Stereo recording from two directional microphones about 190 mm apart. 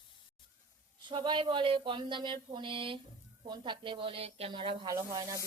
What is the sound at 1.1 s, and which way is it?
Speech, 25° right (ahead or behind).